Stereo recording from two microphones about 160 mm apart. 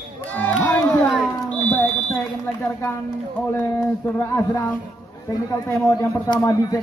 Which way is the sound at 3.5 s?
10° left (ahead or behind).